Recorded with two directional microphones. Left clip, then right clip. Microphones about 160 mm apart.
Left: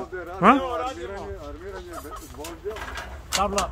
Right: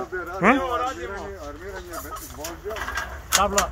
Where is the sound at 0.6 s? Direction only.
45° right (ahead or behind).